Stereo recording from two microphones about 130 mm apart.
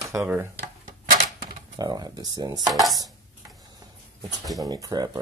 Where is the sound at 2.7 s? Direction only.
Centre (ahead or behind).